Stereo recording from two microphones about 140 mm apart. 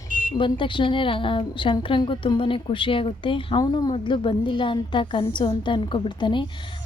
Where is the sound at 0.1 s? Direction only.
75° right (ahead or behind).